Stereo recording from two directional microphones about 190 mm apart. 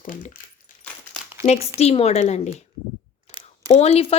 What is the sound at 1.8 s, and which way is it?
Speech, 35° left (ahead or behind).